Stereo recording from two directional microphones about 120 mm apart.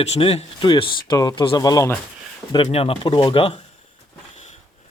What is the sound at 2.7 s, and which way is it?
Speech, 55° left (ahead or behind).